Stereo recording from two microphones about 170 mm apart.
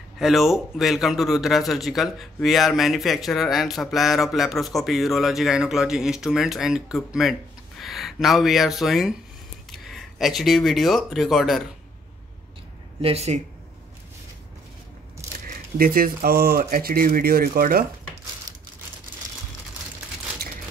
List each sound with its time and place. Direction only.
0.2 s speech: centre (ahead or behind)
13.0 s speech: 40° right (ahead or behind)
15.8 s speech: 55° right (ahead or behind)